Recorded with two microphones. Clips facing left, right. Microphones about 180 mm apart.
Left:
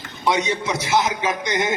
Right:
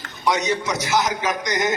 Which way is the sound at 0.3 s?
30° left (ahead or behind).